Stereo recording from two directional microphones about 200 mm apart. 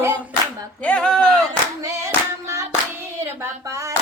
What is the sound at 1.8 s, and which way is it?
Clapping, 15° right (ahead or behind).